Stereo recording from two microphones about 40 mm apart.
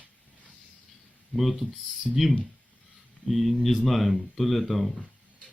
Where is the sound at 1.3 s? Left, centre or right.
Centre.